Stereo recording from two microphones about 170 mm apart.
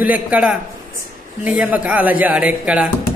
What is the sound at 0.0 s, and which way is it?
Speech, 10° right (ahead or behind).